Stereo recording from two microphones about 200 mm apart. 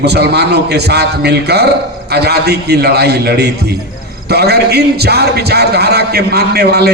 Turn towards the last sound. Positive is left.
turn(degrees=-50)  # may be behind; listen again after turning